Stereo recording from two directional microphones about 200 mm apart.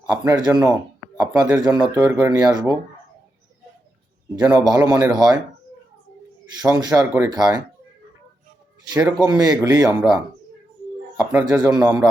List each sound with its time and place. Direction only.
0.1 s speech: 20° right (ahead or behind)
4.4 s speech: 20° right (ahead or behind)
6.6 s speech: 20° right (ahead or behind)
8.9 s speech: 20° right (ahead or behind)
11.2 s speech: 5° right (ahead or behind)